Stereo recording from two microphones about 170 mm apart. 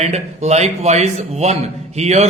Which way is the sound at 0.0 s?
40° right (ahead or behind).